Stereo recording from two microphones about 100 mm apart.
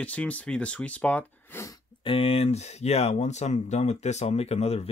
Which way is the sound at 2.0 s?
70° left (ahead or behind).